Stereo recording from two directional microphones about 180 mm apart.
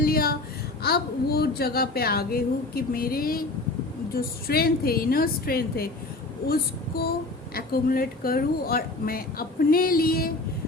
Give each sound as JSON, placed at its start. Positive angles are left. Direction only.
{"t": 0.0, "sound": "a sound", "side_deg": 55}
{"t": 0.8, "sound": "speech", "side_deg": 60}
{"t": 6.5, "sound": "child singing", "side_deg": 55}
{"t": 7.5, "sound": "speech", "side_deg": 55}